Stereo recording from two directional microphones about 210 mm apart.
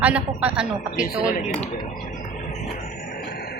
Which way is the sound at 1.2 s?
40° left (ahead or behind).